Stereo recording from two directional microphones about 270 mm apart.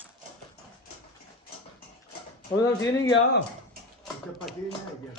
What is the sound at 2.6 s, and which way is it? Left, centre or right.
Speech, centre.